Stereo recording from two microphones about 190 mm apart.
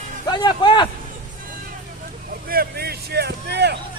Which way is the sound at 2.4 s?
55° right (ahead or behind).